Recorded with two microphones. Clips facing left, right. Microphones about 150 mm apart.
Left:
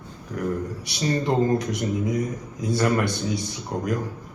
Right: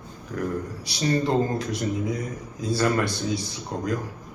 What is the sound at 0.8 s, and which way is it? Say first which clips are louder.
Speech: right 1 dB; 20° left (ahead or behind).